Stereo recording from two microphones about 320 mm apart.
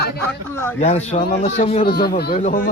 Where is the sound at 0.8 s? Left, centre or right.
Left.